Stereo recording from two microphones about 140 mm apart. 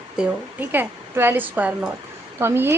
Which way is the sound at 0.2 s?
10° right (ahead or behind).